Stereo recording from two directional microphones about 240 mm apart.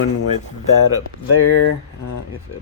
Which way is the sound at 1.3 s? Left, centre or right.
Left.